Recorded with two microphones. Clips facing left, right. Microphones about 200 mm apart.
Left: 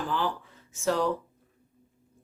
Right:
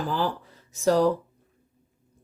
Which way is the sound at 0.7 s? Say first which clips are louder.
Right 6 dB; 40° right (ahead or behind).